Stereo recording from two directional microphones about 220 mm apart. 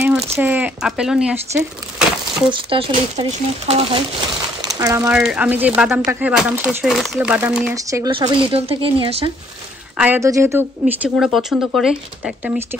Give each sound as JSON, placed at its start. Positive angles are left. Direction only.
{"t": 0.4, "sound": "speech", "side_deg": -5}
{"t": 2.5, "sound": "speech", "side_deg": -20}
{"t": 4.6, "sound": "a sound", "side_deg": -15}
{"t": 5.1, "sound": "speech", "side_deg": -5}
{"t": 9.9, "sound": "speech", "side_deg": -10}